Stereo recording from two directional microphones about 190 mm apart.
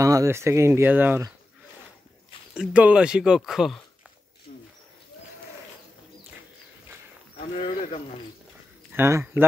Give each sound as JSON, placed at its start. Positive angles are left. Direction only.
{"t": 0.0, "sound": "speech", "side_deg": -15}
{"t": 2.5, "sound": "speech", "side_deg": -5}
{"t": 7.5, "sound": "speech", "side_deg": 30}
{"t": 8.9, "sound": "speech", "side_deg": -15}